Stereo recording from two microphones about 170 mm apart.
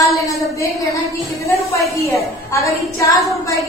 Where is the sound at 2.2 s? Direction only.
20° left (ahead or behind).